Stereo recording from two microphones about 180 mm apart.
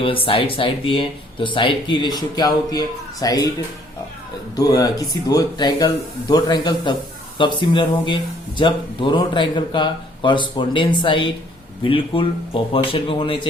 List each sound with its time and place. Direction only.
0.0 s speech: 30° left (ahead or behind)
4.5 s speech: 20° left (ahead or behind)